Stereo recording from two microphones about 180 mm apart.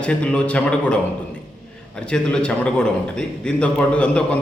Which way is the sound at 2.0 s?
5° left (ahead or behind).